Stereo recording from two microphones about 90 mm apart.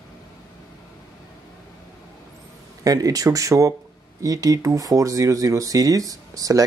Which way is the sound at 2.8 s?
40° right (ahead or behind).